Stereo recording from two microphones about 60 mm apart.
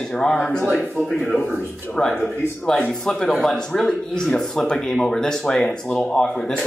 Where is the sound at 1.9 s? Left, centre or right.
Centre.